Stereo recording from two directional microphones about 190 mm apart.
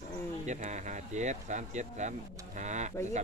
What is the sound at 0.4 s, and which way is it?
Speech, 40° right (ahead or behind).